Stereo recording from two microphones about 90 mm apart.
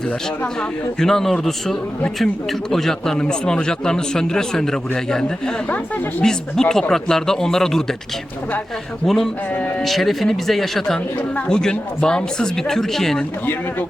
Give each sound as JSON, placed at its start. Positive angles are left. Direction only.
{"t": 0.9, "sound": "speech", "side_deg": 5}
{"t": 6.2, "sound": "speech", "side_deg": 5}
{"t": 9.0, "sound": "speech", "side_deg": 0}
{"t": 13.4, "sound": "speech", "side_deg": 20}